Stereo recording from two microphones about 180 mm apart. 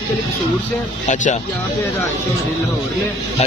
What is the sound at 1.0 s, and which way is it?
Speech, 45° left (ahead or behind).